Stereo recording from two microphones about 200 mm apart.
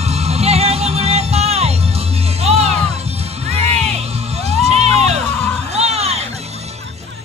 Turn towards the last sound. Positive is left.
turn(degrees=-30)  # may be behind; listen again after turning